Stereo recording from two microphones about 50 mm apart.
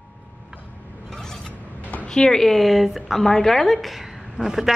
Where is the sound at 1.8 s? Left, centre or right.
Left.